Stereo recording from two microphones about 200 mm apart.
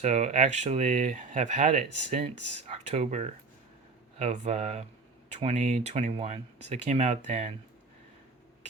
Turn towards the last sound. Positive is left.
turn(degrees=-35)  # may be behind; listen again after turning